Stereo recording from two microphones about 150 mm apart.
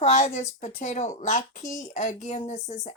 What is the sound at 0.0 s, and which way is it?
Speech, 50° left (ahead or behind).